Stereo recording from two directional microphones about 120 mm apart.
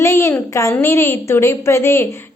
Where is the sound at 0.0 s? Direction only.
25° left (ahead or behind).